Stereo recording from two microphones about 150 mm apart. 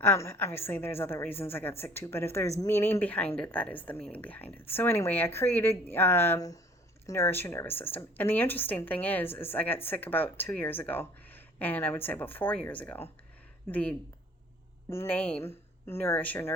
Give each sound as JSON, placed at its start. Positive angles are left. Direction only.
{"t": 0.0, "sound": "a woman's voice", "side_deg": 15}